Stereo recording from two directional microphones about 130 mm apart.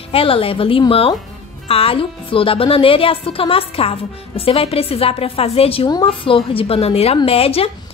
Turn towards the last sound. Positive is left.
turn(degrees=50)  # may be behind; listen again after turning